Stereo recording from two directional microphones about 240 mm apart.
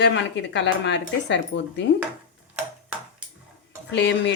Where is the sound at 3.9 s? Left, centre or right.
Left.